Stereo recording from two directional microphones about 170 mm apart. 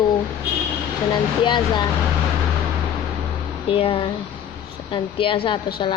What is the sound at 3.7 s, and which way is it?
A woman's voice, 30° left (ahead or behind).